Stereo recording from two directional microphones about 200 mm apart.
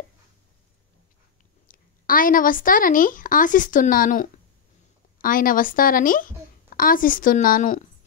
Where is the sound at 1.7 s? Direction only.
45° left (ahead or behind).